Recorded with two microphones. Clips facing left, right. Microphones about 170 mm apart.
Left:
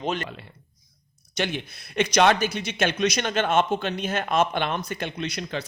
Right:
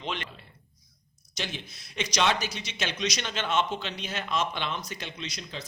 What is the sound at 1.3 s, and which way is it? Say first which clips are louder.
A man's voice: left 9 dB; 60° left (ahead or behind).